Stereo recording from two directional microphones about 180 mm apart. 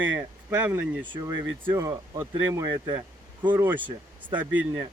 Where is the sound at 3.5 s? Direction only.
10° right (ahead or behind).